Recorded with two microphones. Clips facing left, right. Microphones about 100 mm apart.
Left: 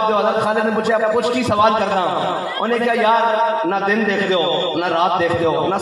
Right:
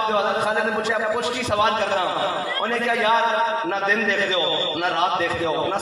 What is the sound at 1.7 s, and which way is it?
A man's voice, 50° left (ahead or behind).